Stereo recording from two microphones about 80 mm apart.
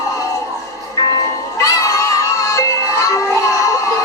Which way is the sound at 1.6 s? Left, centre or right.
Left.